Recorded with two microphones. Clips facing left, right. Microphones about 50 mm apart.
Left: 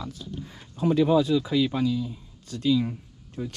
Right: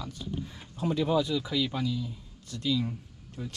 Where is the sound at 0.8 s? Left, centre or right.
Left.